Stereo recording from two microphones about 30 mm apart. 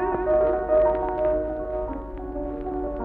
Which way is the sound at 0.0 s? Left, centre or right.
Centre.